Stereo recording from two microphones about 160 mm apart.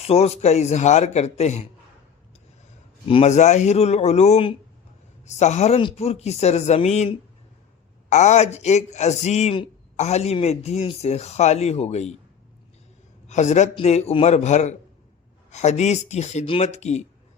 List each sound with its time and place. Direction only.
0.0 s a man's voice: 40° left (ahead or behind)
3.1 s a man's voice: 40° left (ahead or behind)
13.2 s a man's voice: 45° left (ahead or behind)